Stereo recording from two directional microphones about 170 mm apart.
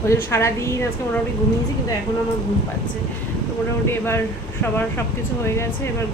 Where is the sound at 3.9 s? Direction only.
15° left (ahead or behind).